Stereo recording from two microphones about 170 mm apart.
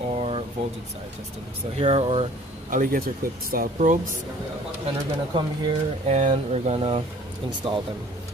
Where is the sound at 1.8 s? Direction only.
35° right (ahead or behind).